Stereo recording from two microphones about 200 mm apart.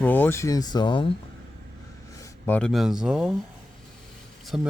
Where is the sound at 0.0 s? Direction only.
10° left (ahead or behind).